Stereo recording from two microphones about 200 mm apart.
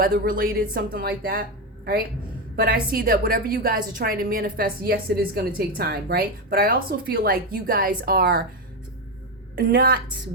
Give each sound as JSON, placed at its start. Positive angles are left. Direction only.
{"t": 0.0, "sound": "a woman's voice", "side_deg": -45}
{"t": 9.6, "sound": "a woman's voice", "side_deg": -45}